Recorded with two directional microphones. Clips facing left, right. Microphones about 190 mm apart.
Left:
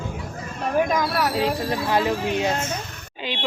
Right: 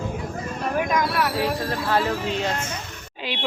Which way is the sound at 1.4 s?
20° left (ahead or behind).